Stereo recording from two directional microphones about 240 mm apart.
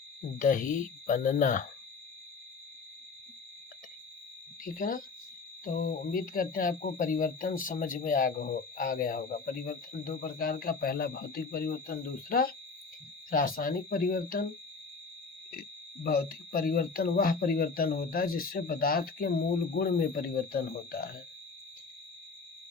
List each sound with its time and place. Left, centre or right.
0.3 s speech: left
4.6 s speech: left
16.0 s speech: left